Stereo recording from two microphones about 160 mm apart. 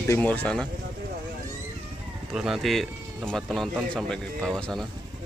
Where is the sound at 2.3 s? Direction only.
5° right (ahead or behind).